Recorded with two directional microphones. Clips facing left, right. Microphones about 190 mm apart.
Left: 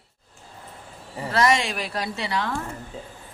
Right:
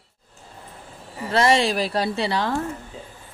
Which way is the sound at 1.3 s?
30° right (ahead or behind).